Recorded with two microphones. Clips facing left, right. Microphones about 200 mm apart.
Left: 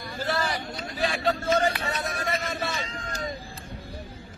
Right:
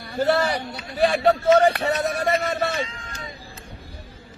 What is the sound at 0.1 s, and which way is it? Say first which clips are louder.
Speech: right 8 dB; 65° right (ahead or behind).